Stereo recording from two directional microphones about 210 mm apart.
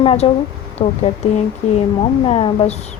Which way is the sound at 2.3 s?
30° left (ahead or behind).